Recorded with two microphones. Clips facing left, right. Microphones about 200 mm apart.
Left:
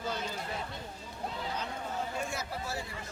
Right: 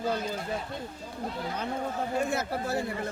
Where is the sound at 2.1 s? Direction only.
55° right (ahead or behind).